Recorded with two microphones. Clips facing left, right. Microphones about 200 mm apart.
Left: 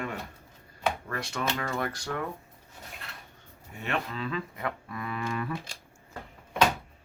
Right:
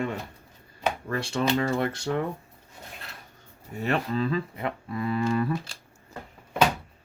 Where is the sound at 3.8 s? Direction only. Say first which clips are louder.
Right 6 dB; 35° right (ahead or behind).